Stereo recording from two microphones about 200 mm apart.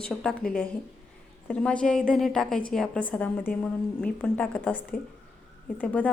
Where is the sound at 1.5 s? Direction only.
5° left (ahead or behind).